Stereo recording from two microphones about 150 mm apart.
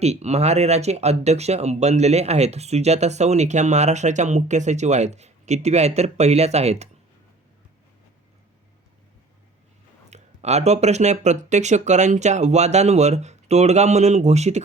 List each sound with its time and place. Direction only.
0.0 s speech: 45° right (ahead or behind)
10.1 s speech: 45° right (ahead or behind)